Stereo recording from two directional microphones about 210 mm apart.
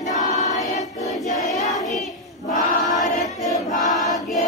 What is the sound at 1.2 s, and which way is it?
Child singing, 35° left (ahead or behind).